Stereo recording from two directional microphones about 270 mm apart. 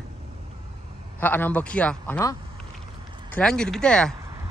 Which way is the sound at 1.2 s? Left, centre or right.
Centre.